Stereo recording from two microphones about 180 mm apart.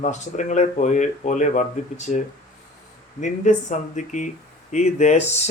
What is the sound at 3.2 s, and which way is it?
Speech, 45° left (ahead or behind).